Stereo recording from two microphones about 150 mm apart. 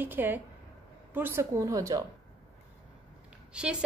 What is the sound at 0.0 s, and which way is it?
A woman's voice, 15° right (ahead or behind).